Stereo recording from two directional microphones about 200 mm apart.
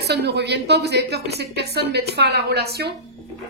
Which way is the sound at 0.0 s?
55° right (ahead or behind).